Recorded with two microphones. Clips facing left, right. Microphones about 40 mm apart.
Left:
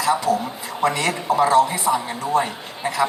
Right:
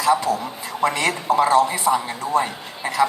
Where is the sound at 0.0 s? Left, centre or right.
Right.